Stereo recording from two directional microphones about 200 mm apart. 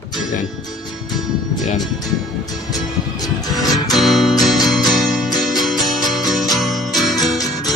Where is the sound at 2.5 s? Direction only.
20° left (ahead or behind).